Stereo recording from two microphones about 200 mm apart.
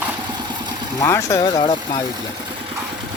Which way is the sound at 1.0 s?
15° left (ahead or behind).